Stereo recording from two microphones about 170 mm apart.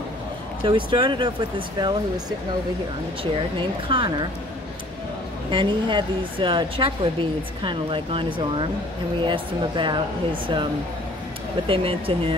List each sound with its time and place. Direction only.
0.7 s speech: 30° right (ahead or behind)
3.5 s speech: 30° right (ahead or behind)
5.5 s speech: 30° right (ahead or behind)